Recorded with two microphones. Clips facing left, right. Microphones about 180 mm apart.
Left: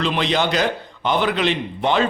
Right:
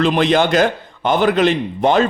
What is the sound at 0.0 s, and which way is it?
A man's voice, 50° right (ahead or behind).